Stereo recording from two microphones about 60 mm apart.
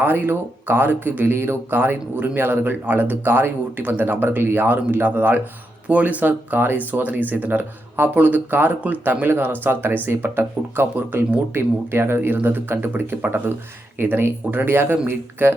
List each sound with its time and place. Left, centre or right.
0.0 s speech: right